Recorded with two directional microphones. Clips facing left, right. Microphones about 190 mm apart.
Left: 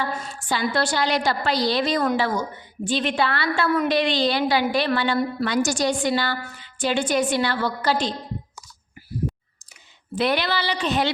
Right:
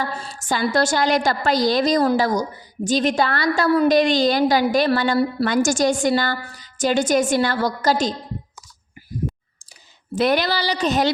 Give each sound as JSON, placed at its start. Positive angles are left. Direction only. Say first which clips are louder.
{"t": 0.0, "sound": "a woman's voice", "louder": "right 1 dB", "side_deg": -35}
{"t": 10.2, "sound": "speech", "louder": "right 3 dB", "side_deg": -45}